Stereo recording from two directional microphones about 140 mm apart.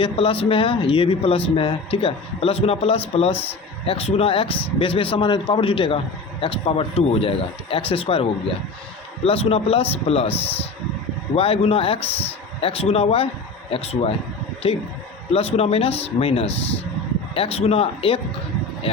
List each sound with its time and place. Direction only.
0.0 s speech: 40° left (ahead or behind)
11.3 s speech: 40° left (ahead or behind)